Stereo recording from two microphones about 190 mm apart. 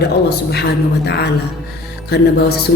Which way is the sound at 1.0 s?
60° left (ahead or behind).